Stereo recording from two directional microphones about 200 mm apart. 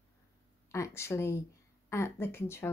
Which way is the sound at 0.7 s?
15° left (ahead or behind).